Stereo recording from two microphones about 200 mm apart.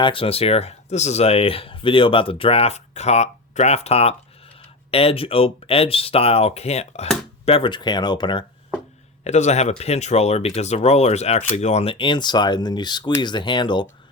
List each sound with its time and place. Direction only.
0.0 s speech: 25° left (ahead or behind)
9.2 s speech: 35° left (ahead or behind)